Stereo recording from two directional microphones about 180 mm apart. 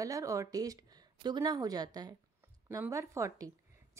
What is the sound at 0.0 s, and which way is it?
A woman's voice, 20° right (ahead or behind).